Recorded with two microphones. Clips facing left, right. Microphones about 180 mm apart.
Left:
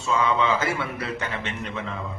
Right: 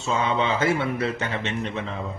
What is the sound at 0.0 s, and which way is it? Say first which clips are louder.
Speech: left 1 dB; 25° right (ahead or behind).